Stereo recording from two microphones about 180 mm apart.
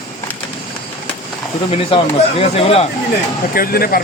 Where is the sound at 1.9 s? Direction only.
30° left (ahead or behind).